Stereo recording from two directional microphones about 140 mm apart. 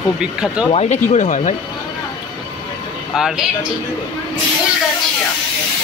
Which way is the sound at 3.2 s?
5° right (ahead or behind).